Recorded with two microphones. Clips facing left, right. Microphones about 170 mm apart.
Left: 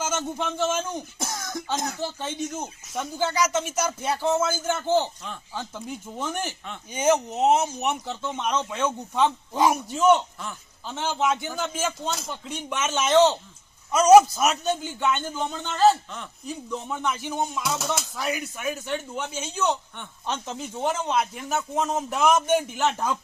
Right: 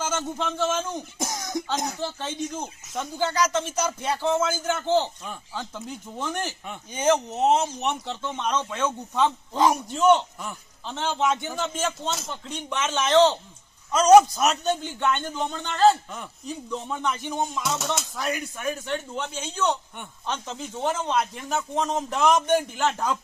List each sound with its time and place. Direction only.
0.0 s a man's voice: 10° left (ahead or behind)
1.2 s cough: 15° right (ahead or behind)
1.7 s speech: 15° right (ahead or behind)
2.0 s a man's voice: 10° left (ahead or behind)